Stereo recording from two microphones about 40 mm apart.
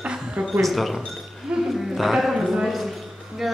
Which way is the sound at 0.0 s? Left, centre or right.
Right.